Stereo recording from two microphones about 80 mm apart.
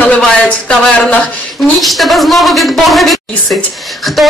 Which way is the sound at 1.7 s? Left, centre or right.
Centre.